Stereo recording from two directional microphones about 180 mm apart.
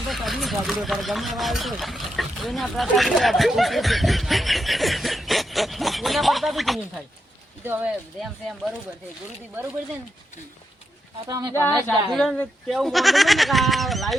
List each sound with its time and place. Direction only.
0.1 s speech: centre (ahead or behind)
7.6 s speech: 10° right (ahead or behind)
11.3 s speech: 20° right (ahead or behind)
11.9 s speech: 5° left (ahead or behind)